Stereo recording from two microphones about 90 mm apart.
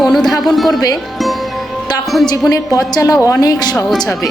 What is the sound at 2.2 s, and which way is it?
A woman's voice, 40° left (ahead or behind).